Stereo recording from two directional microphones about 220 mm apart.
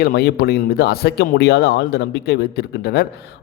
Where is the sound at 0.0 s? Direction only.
45° left (ahead or behind).